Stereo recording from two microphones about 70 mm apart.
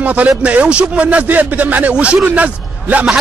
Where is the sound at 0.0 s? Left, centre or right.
Right.